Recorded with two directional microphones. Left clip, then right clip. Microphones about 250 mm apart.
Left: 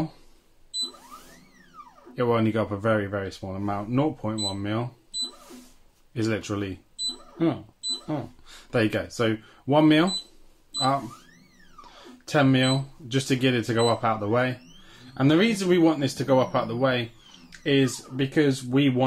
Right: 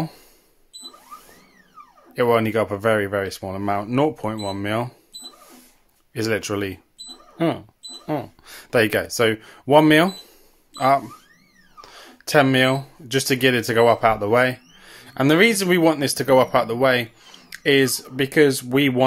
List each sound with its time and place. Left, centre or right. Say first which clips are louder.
2.1 s speech: right 6 dB; right
6.1 s speech: right 5 dB; right
11.8 s speech: right 7 dB; right